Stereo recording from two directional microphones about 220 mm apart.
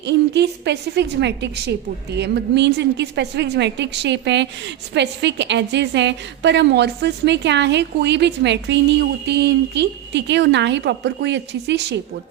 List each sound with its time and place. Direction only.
0.0 s a woman's voice: 50° right (ahead or behind)